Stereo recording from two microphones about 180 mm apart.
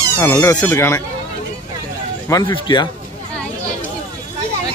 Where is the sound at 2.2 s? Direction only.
20° left (ahead or behind).